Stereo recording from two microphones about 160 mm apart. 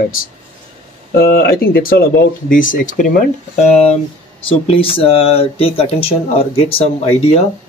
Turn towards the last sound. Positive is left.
turn(degrees=40)  # may be behind; listen again after turning